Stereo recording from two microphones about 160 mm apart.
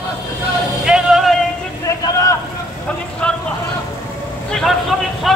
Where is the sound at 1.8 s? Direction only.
20° left (ahead or behind).